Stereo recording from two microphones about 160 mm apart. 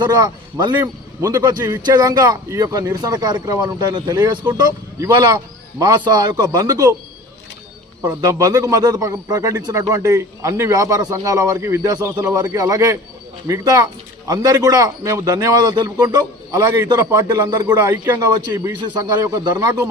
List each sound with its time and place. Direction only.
0.0 s a man's voice: 25° right (ahead or behind)
8.0 s a man's voice: 25° right (ahead or behind)